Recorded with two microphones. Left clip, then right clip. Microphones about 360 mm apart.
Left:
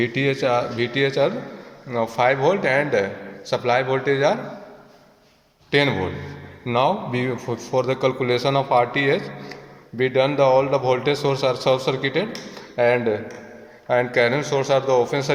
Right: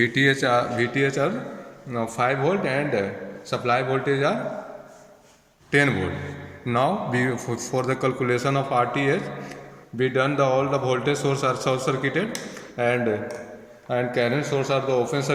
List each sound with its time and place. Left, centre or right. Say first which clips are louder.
0.0 s speech: right 1 dB; centre
5.7 s speech: left 1 dB; centre